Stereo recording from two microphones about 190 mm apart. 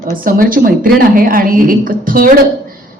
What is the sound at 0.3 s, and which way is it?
A woman's voice, 50° right (ahead or behind).